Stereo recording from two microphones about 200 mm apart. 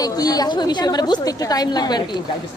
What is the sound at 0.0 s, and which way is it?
A woman's voice, 20° left (ahead or behind).